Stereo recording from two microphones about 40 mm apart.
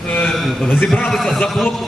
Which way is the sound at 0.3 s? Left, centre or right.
Centre.